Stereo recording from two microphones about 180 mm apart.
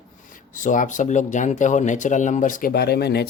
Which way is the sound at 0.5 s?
45° left (ahead or behind).